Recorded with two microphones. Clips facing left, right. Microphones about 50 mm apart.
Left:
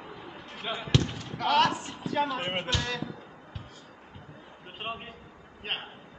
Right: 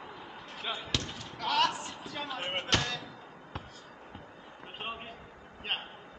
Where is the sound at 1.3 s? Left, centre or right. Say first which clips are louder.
Left 5 dB; left.